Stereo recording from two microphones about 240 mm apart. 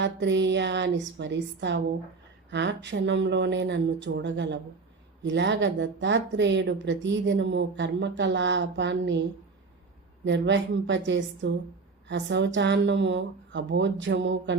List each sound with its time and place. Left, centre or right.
0.0 s a woman's voice: right
10.2 s a woman's voice: right